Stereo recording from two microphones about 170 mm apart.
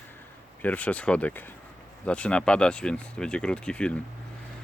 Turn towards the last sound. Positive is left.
turn(degrees=5)  # may be behind; listen again after turning